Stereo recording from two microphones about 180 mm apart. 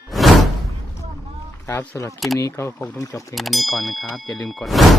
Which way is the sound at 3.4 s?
Centre (ahead or behind).